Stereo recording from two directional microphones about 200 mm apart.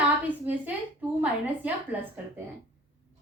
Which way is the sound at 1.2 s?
10° right (ahead or behind).